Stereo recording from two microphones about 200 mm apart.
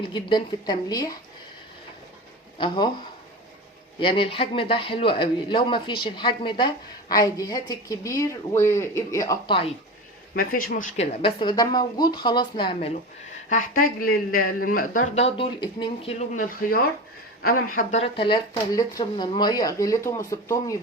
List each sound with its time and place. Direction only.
0.1 s speech: 25° left (ahead or behind)
2.6 s speech: 25° left (ahead or behind)
4.0 s speech: 25° left (ahead or behind)
10.7 s speech: 40° left (ahead or behind); by 12.9 s 25° left (ahead or behind)
13.5 s speech: 45° left (ahead or behind); by 16.1 s 25° left (ahead or behind)
16.3 s speech: 45° left (ahead or behind)
18.0 s speech: 25° left (ahead or behind)